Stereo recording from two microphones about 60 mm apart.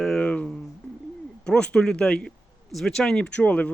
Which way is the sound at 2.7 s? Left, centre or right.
Centre.